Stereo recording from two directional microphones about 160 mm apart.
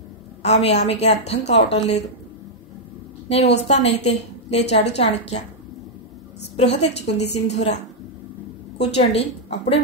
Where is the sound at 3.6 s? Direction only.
40° left (ahead or behind).